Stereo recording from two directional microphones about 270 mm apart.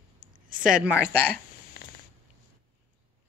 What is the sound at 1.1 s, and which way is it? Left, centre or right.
Speech, right.